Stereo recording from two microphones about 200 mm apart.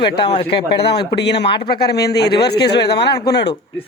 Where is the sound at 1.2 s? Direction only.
55° left (ahead or behind).